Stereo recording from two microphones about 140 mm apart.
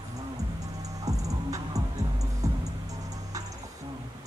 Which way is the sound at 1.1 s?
25° right (ahead or behind).